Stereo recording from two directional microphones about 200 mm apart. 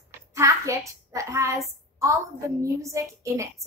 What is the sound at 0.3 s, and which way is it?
A child's voice, 15° right (ahead or behind).